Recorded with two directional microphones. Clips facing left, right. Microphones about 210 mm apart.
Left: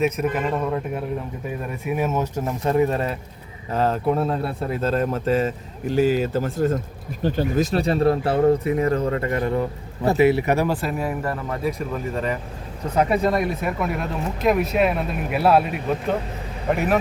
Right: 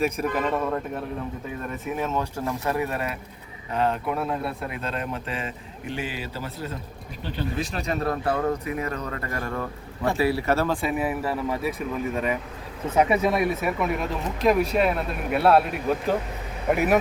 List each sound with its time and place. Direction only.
0.0 s a man's voice: 5° left (ahead or behind)
10.8 s a man's voice: centre (ahead or behind)